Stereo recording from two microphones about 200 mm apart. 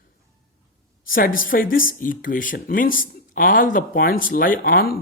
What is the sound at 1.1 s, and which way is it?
Speech, 45° left (ahead or behind).